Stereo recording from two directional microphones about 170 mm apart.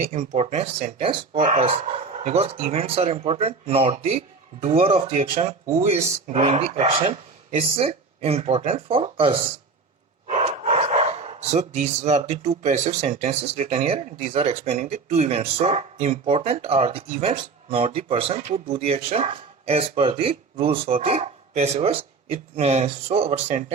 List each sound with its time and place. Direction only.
0.0 s speech: 45° right (ahead or behind)